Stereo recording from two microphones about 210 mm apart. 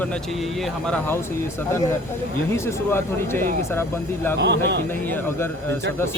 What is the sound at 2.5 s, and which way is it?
Speech, 10° left (ahead or behind).